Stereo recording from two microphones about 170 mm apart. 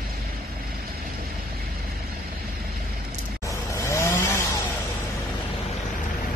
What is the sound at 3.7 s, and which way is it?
Chainsaw, 15° left (ahead or behind).